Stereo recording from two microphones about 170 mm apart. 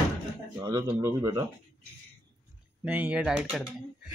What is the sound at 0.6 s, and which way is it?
Speech, 25° right (ahead or behind).